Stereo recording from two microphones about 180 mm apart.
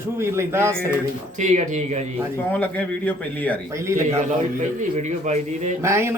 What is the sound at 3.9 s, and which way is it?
Speech, 15° right (ahead or behind).